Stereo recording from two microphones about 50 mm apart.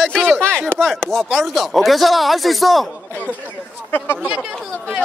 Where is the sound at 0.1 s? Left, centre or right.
Centre.